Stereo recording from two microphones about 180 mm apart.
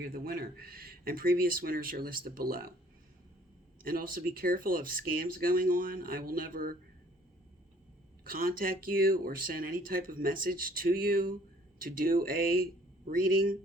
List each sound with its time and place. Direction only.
0.0 s speech: 55° right (ahead or behind)
3.8 s speech: 55° right (ahead or behind)
8.2 s speech: 55° right (ahead or behind)